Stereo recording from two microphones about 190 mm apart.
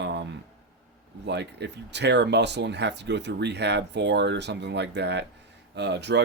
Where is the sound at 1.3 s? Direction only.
65° right (ahead or behind).